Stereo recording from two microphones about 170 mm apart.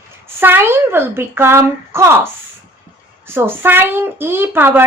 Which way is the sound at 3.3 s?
10° right (ahead or behind).